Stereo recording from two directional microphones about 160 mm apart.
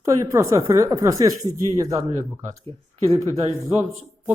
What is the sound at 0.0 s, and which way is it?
Speech, 20° right (ahead or behind).